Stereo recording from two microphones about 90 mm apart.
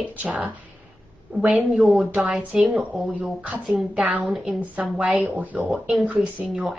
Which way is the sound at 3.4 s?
15° right (ahead or behind).